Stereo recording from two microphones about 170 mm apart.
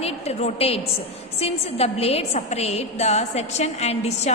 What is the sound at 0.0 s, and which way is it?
A woman's voice, 40° left (ahead or behind).